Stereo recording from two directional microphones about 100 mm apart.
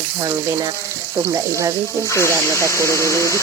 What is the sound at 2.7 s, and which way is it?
Speech, 30° left (ahead or behind).